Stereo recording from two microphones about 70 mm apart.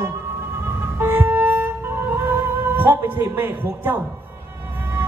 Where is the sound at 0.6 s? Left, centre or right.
Right.